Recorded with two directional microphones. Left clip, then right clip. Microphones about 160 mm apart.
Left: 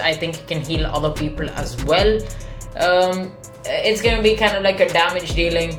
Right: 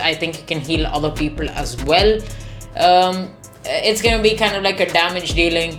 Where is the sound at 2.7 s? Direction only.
45° right (ahead or behind).